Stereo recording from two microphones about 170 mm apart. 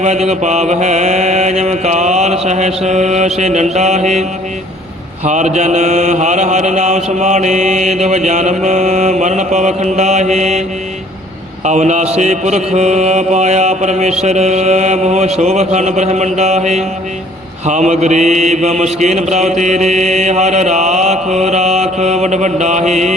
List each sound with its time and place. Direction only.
0.0 s mantra: 40° right (ahead or behind)
11.6 s mantra: 45° right (ahead or behind)